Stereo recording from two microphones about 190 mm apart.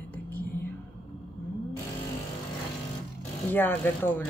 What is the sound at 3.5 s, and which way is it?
Speech, 10° left (ahead or behind).